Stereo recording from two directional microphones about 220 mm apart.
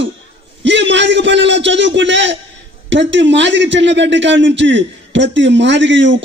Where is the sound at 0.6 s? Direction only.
55° right (ahead or behind).